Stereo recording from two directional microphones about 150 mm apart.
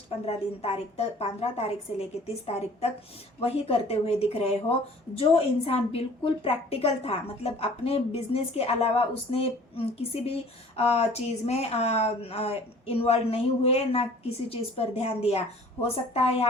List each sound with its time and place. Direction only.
0.3 s a woman's voice: 45° left (ahead or behind)